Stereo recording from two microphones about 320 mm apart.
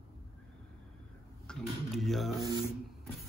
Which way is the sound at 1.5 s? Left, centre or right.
Centre.